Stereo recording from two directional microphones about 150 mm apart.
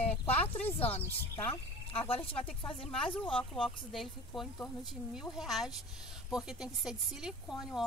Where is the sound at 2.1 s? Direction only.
40° left (ahead or behind).